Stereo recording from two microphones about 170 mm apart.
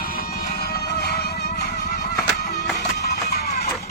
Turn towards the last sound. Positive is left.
turn(degrees=70)  # may be behind; listen again after turning